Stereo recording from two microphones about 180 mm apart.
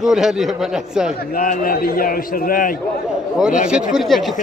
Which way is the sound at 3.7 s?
5° right (ahead or behind).